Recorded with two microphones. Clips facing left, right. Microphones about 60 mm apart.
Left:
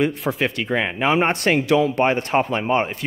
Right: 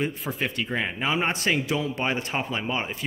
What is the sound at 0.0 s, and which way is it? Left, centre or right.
Speech, left.